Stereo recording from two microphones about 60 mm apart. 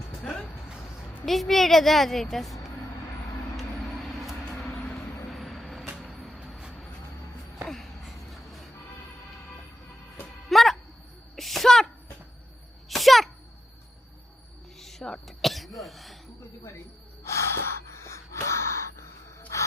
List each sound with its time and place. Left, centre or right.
1.2 s a woman's voice: centre
3.6 s vehicle: centre
7.7 s a sound: centre
10.5 s music: centre
11.3 s sneeze: centre
12.9 s sneeze: centre
14.8 s a sound: centre
15.4 s cough: centre
17.2 s gasp: left